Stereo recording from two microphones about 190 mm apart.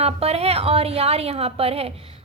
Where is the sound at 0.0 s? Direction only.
35° right (ahead or behind).